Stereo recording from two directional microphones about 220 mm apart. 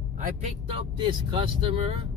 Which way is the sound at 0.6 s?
25° right (ahead or behind).